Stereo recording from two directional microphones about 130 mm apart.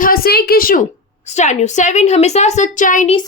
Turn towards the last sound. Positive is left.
turn(degrees=85)